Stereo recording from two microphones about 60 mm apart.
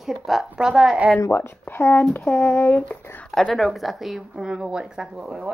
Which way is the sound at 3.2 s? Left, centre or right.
Centre.